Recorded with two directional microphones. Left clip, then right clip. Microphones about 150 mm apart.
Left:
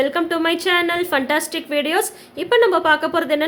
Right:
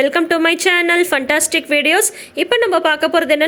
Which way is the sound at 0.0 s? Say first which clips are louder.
Right 5 dB; 30° right (ahead or behind).